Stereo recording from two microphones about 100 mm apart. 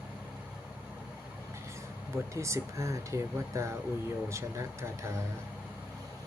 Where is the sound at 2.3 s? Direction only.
30° right (ahead or behind).